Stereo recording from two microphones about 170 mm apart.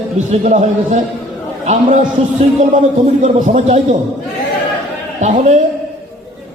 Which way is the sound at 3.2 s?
45° right (ahead or behind).